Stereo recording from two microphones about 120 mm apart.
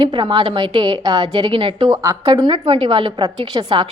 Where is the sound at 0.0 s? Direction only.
40° right (ahead or behind).